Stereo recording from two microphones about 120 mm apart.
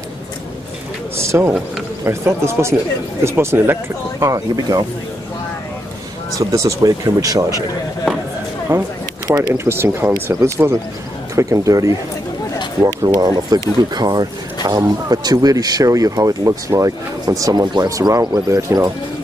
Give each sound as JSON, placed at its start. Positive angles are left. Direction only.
{"t": 1.1, "sound": "speech", "side_deg": -20}
{"t": 6.3, "sound": "speech", "side_deg": -30}
{"t": 8.7, "sound": "speech", "side_deg": -20}